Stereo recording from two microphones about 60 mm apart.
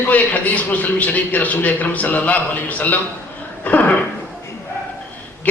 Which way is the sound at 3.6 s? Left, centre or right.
Left.